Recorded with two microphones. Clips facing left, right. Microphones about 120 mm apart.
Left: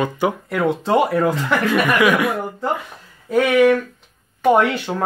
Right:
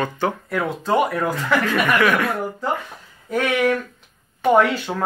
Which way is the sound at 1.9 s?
10° left (ahead or behind).